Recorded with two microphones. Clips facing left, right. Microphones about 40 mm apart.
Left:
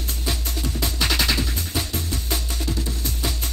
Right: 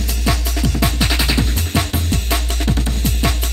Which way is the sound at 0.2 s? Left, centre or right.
Right.